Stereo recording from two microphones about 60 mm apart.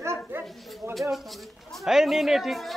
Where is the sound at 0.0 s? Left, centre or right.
Right.